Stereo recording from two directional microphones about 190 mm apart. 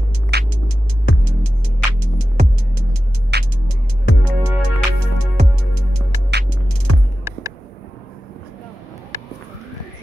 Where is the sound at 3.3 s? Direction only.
60° right (ahead or behind).